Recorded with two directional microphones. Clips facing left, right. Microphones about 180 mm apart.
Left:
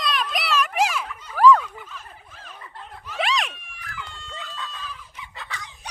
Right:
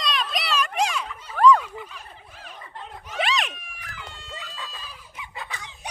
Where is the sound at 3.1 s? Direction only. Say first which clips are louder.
Left 1 dB; centre (ahead or behind).